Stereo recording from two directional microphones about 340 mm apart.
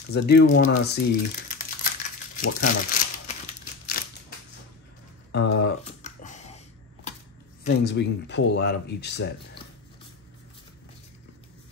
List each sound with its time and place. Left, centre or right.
0.1 s speech: left
2.4 s crumpling: left
4.0 s crushing: left
5.3 s a sound: left
7.6 s speech: left